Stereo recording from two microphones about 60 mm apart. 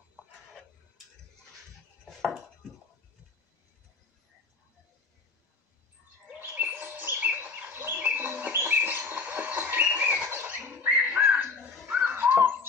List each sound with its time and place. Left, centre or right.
6.2 s bird: right
7.9 s music: right
10.7 s bird: right